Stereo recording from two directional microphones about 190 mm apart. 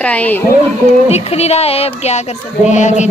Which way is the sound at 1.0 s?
35° left (ahead or behind).